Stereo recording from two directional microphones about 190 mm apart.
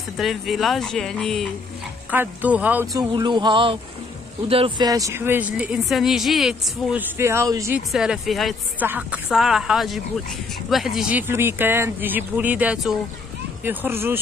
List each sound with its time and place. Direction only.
0.2 s speech: centre (ahead or behind); by 7.8 s 15° right (ahead or behind)
7.9 s speech: centre (ahead or behind)